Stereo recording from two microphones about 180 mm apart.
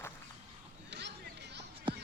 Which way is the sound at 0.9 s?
75° right (ahead or behind).